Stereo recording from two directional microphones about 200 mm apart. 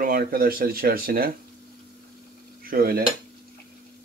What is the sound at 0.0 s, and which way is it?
Speech, 45° right (ahead or behind).